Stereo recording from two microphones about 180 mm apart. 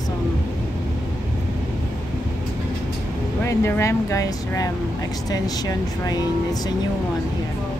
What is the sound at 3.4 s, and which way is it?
Speech, 15° left (ahead or behind).